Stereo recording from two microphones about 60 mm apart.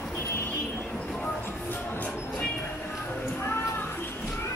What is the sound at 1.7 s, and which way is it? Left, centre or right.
Music, left.